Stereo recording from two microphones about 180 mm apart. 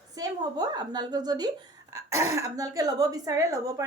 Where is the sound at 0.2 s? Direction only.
20° right (ahead or behind).